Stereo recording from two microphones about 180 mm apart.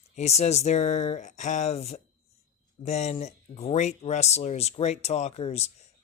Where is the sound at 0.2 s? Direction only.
35° left (ahead or behind).